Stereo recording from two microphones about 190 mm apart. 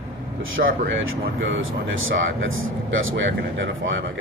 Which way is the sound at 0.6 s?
90° right.